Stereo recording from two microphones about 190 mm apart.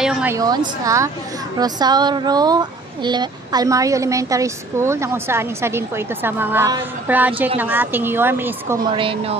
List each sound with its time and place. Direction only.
0.0 s speech: 5° right (ahead or behind)
0.4 s speech: 20° right (ahead or behind)
8.9 s speech: 30° right (ahead or behind)